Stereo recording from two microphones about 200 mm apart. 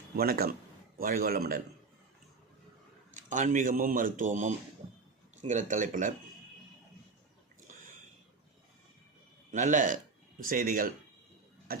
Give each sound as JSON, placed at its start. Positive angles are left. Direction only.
{"t": 0.2, "sound": "a man's voice", "side_deg": -50}
{"t": 3.2, "sound": "speech", "side_deg": -40}
{"t": 9.5, "sound": "a man's voice", "side_deg": -40}
{"t": 11.7, "sound": "tick-tock", "side_deg": -45}